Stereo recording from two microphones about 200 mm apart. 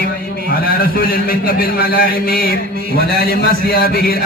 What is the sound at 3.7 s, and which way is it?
Speech, 50° left (ahead or behind).